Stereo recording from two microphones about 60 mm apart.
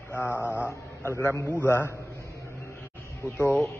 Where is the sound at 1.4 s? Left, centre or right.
Left.